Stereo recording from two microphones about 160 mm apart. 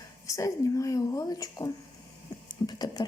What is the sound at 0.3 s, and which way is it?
A woman's voice, 20° left (ahead or behind).